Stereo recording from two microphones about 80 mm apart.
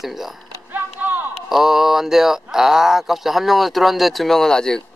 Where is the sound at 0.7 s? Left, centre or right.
Right.